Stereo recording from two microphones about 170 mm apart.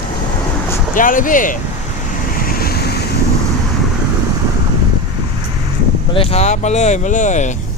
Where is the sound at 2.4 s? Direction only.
60° left (ahead or behind).